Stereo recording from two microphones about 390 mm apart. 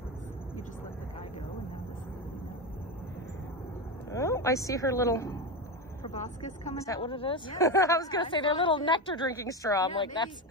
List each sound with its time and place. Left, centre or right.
4.1 s a woman's voice: centre
6.1 s a woman's voice: centre